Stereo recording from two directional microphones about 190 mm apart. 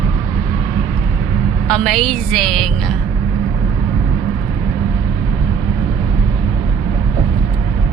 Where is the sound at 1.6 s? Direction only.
5° left (ahead or behind).